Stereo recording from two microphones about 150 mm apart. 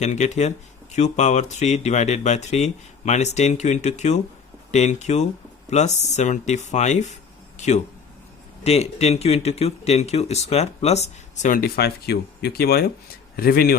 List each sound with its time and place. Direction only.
0.0 s speech: 50° left (ahead or behind)
11.5 s speech: 85° left